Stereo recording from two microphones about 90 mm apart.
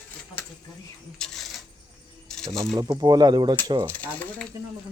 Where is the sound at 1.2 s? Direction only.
10° left (ahead or behind).